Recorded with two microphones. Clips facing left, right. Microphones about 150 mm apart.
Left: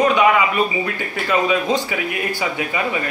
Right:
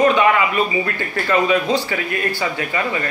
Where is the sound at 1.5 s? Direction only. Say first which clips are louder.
Right 1 dB; 15° left (ahead or behind).